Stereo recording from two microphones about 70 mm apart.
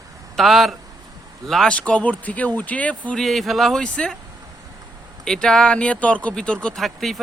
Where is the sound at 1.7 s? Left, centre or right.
Centre.